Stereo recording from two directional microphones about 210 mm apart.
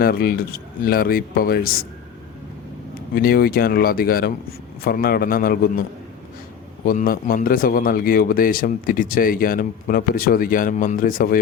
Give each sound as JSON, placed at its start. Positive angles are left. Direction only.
{"t": 0.0, "sound": "speech", "side_deg": 45}
{"t": 3.2, "sound": "speech", "side_deg": 45}
{"t": 6.8, "sound": "speech", "side_deg": 45}